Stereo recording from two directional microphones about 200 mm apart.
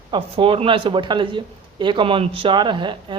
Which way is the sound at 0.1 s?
25° right (ahead or behind).